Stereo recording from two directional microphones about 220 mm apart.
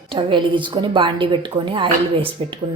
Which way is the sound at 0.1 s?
25° right (ahead or behind).